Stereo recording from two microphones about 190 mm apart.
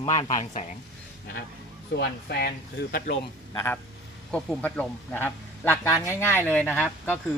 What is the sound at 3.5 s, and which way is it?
A man's voice, 10° left (ahead or behind).